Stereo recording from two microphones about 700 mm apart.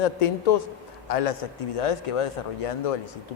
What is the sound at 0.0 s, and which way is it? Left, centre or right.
Speech, left.